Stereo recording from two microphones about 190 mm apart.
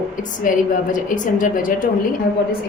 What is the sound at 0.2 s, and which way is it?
A woman's voice, 40° left (ahead or behind).